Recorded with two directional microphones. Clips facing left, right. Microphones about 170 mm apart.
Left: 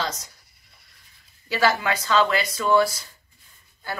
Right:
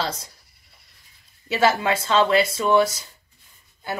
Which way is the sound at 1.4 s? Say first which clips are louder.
Right 2 dB; 25° right (ahead or behind).